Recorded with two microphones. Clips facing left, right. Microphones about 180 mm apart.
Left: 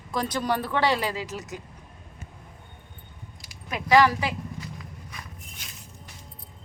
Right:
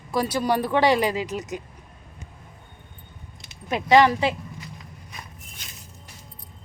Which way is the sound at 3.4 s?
25° right (ahead or behind).